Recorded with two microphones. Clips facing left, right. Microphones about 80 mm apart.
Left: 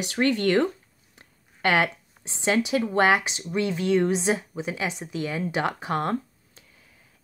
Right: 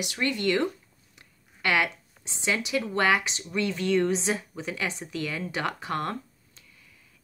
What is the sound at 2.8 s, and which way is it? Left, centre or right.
A woman's voice, left.